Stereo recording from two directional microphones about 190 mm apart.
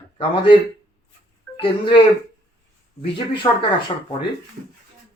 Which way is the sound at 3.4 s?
25° left (ahead or behind).